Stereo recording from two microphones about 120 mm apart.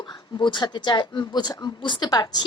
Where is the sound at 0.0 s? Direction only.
40° left (ahead or behind).